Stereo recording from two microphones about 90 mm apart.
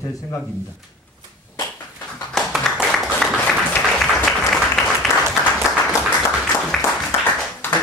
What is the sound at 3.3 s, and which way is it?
Applause, 5° left (ahead or behind).